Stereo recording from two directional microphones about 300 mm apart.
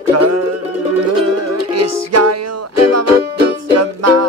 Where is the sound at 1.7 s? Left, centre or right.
Right.